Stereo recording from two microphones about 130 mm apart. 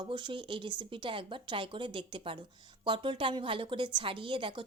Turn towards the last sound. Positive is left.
turn(degrees=-40)  # may be behind; listen again after turning